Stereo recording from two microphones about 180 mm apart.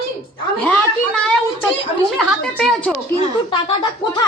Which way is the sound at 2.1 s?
5° left (ahead or behind).